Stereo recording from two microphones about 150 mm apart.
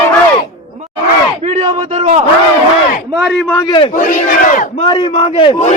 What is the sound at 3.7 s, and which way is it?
Speech, 35° left (ahead or behind).